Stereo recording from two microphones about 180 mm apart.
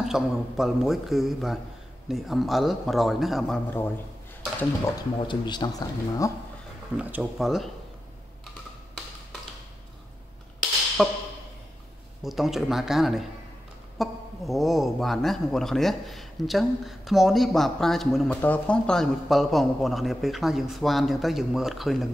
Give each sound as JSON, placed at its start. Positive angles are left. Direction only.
{"t": 0.0, "sound": "a man's voice", "side_deg": 0}
{"t": 5.2, "sound": "speech", "side_deg": 25}
{"t": 7.0, "sound": "a man's voice", "side_deg": -10}
{"t": 11.0, "sound": "a man's voice", "side_deg": 0}
{"t": 12.2, "sound": "a man's voice", "side_deg": 0}